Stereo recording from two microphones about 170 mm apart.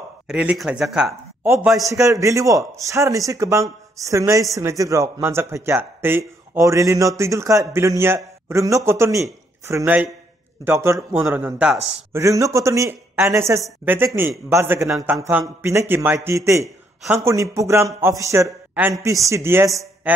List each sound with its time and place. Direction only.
0.3 s speech: 5° right (ahead or behind)
1.4 s speech: 15° right (ahead or behind)
14.9 s speech: centre (ahead or behind)
15.1 s speech: 15° right (ahead or behind)